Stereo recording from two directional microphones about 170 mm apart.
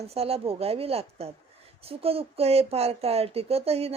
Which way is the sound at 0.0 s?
35° right (ahead or behind).